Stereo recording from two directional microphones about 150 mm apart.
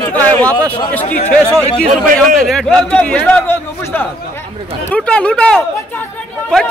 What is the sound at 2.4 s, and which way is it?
A man's voice, 5° left (ahead or behind).